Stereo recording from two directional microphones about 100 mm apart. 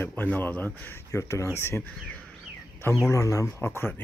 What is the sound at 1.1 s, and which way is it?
Speech, 30° left (ahead or behind).